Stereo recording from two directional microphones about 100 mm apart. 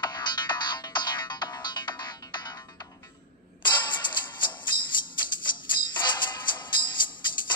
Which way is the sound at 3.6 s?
50° left (ahead or behind).